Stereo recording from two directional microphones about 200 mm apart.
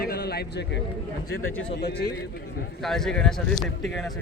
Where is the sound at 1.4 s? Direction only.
85° left.